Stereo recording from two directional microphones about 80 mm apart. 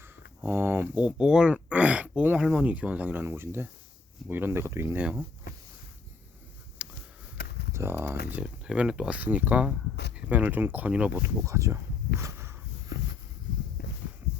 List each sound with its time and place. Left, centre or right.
0.0 s a sound: right
0.9 s speech: centre; by 4.9 s right
4.9 s speech: centre
6.8 s a sound: centre
7.7 s speech: right
8.4 s speech: centre
11.2 s speech: right